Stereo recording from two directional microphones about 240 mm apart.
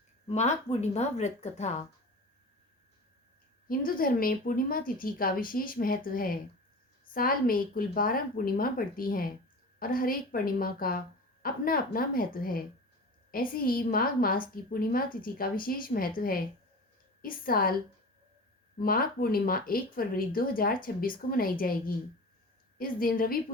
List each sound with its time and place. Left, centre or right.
0.3 s speech: left
3.7 s speech: left
18.8 s speech: left